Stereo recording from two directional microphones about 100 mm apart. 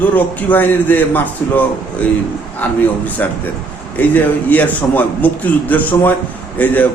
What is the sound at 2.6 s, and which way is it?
A man's voice, 15° left (ahead or behind).